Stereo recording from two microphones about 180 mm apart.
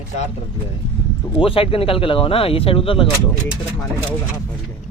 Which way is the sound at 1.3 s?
30° left (ahead or behind).